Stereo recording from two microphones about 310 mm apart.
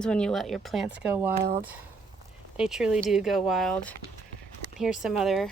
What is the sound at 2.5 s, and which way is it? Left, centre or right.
A woman's voice, centre.